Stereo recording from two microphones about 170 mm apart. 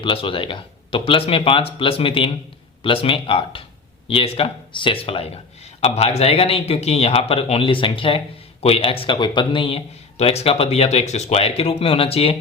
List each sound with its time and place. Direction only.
0.0 s speech: 30° left (ahead or behind)